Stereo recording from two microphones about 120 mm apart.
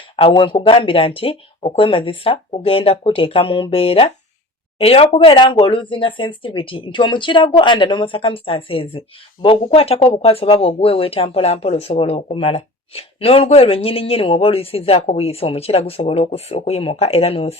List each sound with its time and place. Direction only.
0.2 s speech: 45° left (ahead or behind)